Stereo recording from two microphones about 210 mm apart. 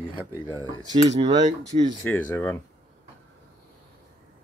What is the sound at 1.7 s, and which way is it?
Speech, 35° right (ahead or behind).